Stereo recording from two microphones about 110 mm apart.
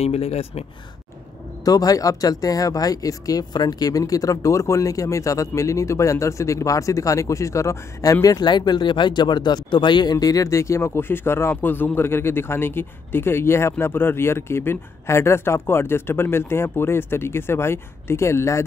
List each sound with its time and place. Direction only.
0.0 s speech: 70° left (ahead or behind)
1.6 s speech: 35° left (ahead or behind)